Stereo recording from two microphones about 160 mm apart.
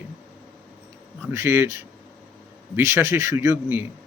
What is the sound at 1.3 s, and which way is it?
Speech, 15° right (ahead or behind).